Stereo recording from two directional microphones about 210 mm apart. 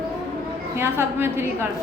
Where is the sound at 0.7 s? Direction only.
10° right (ahead or behind).